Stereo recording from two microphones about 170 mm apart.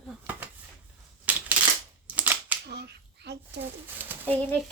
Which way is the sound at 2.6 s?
75° right (ahead or behind).